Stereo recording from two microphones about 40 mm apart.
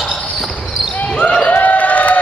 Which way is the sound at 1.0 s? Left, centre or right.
Left.